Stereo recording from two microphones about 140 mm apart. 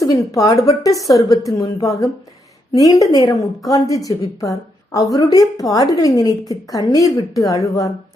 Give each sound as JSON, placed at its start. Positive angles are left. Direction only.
{"t": 0.0, "sound": "a woman's voice", "side_deg": 25}